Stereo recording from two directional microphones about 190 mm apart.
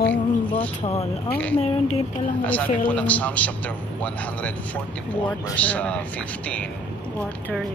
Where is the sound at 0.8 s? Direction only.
35° left (ahead or behind).